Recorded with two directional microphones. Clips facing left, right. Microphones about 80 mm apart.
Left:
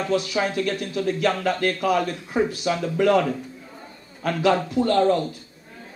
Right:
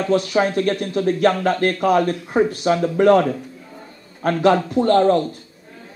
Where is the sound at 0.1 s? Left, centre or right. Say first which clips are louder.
Right 6 dB; right.